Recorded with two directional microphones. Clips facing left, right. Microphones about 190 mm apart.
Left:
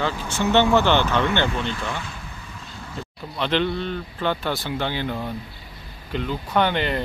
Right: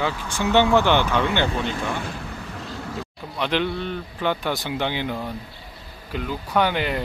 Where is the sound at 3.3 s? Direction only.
10° right (ahead or behind).